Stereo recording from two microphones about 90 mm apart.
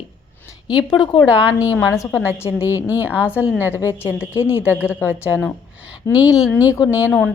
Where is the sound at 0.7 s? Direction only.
55° left (ahead or behind).